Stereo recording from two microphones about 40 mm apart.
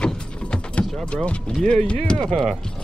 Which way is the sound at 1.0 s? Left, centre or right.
Left.